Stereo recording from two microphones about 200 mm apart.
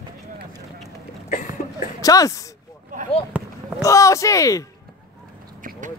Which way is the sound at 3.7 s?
15° left (ahead or behind).